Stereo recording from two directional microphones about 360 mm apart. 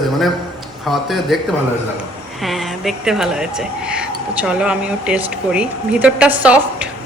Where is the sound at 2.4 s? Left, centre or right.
Centre.